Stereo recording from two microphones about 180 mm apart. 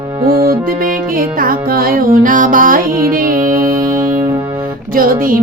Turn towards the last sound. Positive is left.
turn(degrees=-50)  # may be behind; listen again after turning